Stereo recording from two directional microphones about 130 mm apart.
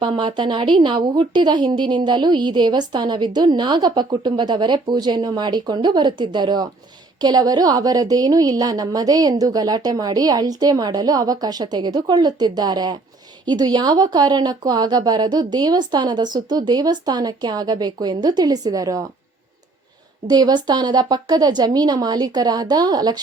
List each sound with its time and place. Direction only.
0.0 s a woman's voice: 35° right (ahead or behind)
20.2 s speech: 35° right (ahead or behind)